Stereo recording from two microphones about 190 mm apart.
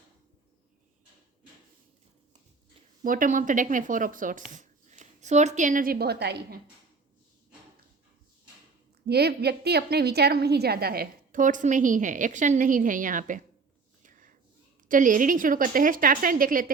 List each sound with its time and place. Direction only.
3.0 s a woman's voice: 45° right (ahead or behind)
9.0 s a woman's voice: 60° right (ahead or behind)
14.0 s a sound: 45° right (ahead or behind)
14.8 s a woman's voice: 45° right (ahead or behind)